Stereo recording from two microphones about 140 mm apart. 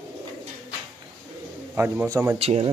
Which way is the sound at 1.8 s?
20° right (ahead or behind).